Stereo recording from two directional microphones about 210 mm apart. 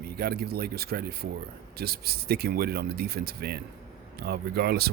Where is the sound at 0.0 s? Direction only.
45° right (ahead or behind).